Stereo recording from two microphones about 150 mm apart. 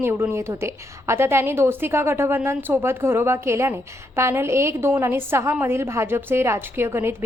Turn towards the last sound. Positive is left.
turn(degrees=-15)  # may be behind; listen again after turning